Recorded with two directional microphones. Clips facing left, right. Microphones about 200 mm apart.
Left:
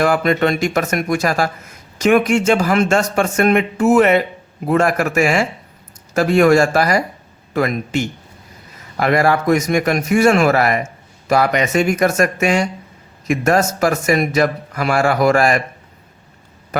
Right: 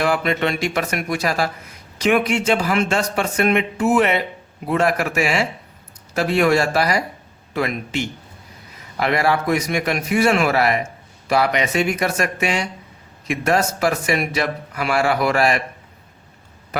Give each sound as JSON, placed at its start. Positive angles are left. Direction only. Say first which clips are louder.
{"t": 0.0, "sound": "a man's voice", "louder": "left 5 dB", "side_deg": 45}